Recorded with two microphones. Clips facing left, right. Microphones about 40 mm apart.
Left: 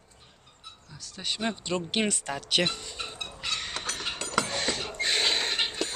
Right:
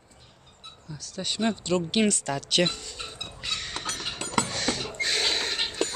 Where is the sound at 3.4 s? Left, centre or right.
Left.